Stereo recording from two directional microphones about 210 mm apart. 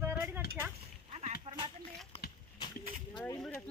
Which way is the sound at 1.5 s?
30° right (ahead or behind).